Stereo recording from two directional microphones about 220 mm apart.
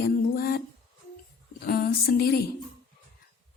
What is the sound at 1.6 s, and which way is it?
Speech, 45° left (ahead or behind).